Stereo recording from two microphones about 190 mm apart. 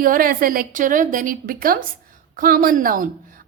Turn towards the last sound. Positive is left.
turn(degrees=-45)  # may be behind; listen again after turning